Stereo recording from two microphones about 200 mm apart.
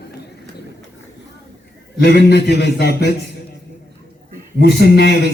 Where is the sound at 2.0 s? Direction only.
55° left (ahead or behind).